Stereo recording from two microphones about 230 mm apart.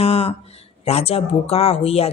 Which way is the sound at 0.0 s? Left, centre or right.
Left.